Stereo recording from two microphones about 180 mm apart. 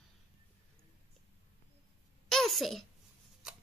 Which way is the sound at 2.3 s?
Centre (ahead or behind).